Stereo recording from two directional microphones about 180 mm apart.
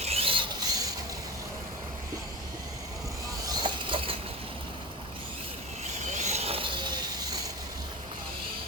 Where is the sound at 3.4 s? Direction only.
25° right (ahead or behind).